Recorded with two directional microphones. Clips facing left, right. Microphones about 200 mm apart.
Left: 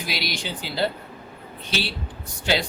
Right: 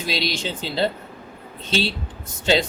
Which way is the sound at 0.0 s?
25° right (ahead or behind).